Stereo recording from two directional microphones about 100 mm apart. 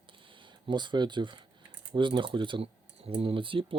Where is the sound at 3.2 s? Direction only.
65° right (ahead or behind).